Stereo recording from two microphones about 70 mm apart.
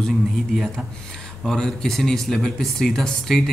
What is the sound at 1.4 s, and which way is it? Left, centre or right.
Speech, centre.